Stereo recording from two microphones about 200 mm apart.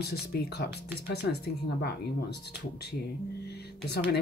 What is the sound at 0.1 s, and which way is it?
Speech, 50° left (ahead or behind).